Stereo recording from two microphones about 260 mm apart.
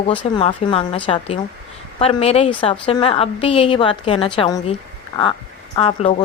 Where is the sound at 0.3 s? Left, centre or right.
Centre.